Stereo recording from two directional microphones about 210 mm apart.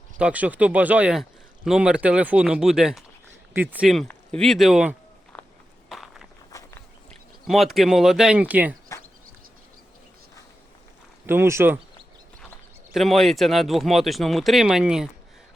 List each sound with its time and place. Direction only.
0.2 s speech: 5° right (ahead or behind)
5.3 s walk: 5° left (ahead or behind)
6.5 s walk: 15° left (ahead or behind)
7.4 s speech: centre (ahead or behind)
8.9 s a sound: 15° left (ahead or behind)
11.3 s speech: 10° right (ahead or behind)
12.9 s speech: centre (ahead or behind)